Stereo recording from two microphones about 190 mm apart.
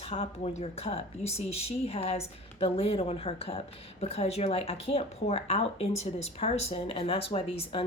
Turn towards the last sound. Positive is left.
turn(degrees=30)  # may be behind; listen again after turning